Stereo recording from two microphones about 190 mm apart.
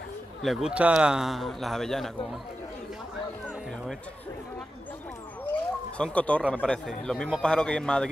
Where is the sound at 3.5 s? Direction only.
Centre (ahead or behind).